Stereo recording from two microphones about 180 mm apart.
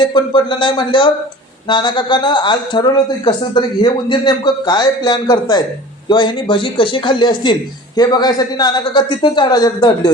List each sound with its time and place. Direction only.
0.0 s speech: 25° left (ahead or behind)